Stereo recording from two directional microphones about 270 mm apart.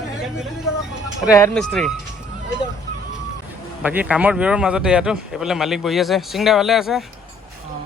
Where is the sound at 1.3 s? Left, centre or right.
Centre.